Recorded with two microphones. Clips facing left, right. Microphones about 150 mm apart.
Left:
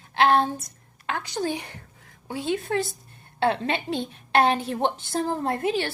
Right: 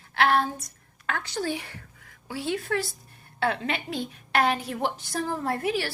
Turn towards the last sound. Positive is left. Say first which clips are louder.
# left 2 dB
turn(degrees=25)  # may be behind; listen again after turning